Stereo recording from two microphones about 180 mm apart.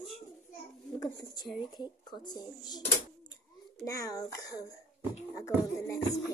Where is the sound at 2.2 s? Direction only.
25° left (ahead or behind).